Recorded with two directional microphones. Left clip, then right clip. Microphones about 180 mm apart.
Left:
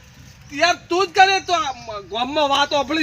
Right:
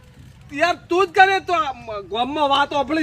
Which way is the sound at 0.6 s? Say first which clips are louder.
Even; 15° right (ahead or behind).